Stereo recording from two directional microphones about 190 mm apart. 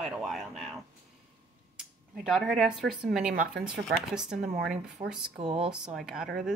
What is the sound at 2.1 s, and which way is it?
Speech, 5° right (ahead or behind).